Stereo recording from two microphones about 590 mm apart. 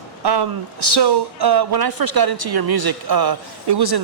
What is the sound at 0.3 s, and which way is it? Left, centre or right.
Speech, right.